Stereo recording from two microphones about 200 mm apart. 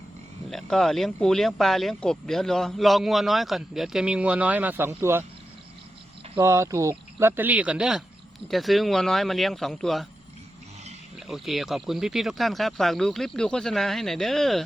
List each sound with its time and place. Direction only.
0.5 s speech: centre (ahead or behind)
6.4 s speech: 15° right (ahead or behind); by 10.1 s centre (ahead or behind)
11.3 s speech: centre (ahead or behind)